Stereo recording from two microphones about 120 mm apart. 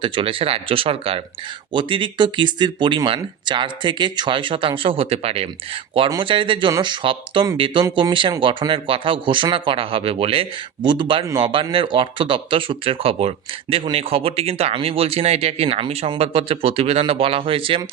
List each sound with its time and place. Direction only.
0.0 s speech: 45° right (ahead or behind)
6.1 s speech: 45° right (ahead or behind)
10.8 s speech: 40° right (ahead or behind)